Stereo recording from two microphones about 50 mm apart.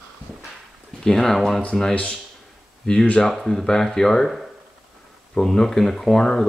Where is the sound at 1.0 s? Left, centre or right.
Centre.